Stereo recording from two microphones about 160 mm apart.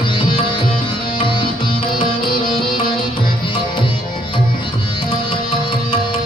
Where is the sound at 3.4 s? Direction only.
30° left (ahead or behind).